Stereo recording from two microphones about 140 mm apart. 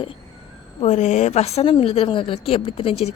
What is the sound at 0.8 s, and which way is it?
A woman's voice, 55° left (ahead or behind).